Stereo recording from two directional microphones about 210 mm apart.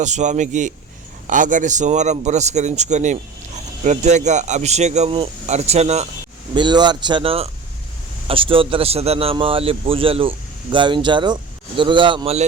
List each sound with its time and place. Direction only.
0.0 s a man's voice: 35° right (ahead or behind)